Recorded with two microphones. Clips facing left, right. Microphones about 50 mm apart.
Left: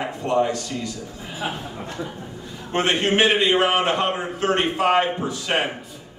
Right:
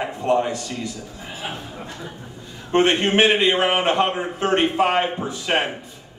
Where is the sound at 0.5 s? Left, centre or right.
Right.